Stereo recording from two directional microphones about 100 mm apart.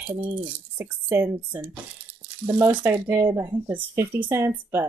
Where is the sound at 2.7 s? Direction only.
20° right (ahead or behind).